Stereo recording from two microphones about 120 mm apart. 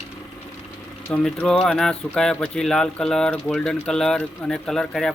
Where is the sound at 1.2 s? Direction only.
5° left (ahead or behind).